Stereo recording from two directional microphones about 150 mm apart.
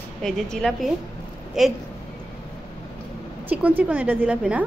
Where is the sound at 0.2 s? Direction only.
Centre (ahead or behind).